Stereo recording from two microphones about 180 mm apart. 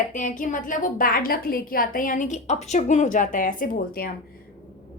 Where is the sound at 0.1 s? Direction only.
45° left (ahead or behind).